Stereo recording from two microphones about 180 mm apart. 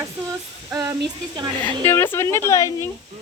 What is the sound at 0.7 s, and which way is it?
Speech, 15° right (ahead or behind).